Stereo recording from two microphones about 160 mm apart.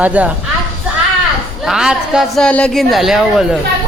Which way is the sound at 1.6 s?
5° right (ahead or behind).